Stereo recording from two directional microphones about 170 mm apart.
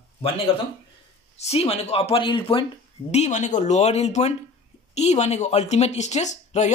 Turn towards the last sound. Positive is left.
turn(degrees=45)  # may be behind; listen again after turning